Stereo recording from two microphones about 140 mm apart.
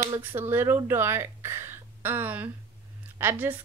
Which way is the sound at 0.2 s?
15° right (ahead or behind).